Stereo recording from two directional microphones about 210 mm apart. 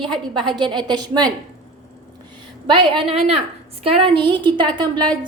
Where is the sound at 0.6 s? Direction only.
20° right (ahead or behind).